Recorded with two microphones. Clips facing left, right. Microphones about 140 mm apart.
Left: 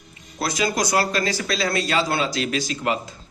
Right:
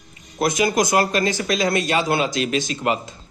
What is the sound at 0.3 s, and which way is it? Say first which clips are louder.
A man's voice: right 4 dB; 20° right (ahead or behind).